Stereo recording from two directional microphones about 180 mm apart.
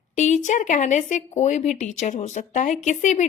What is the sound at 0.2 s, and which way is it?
Speech, 40° left (ahead or behind).